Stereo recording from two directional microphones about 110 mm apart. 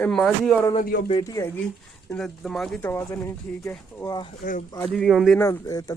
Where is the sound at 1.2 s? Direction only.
30° left (ahead or behind).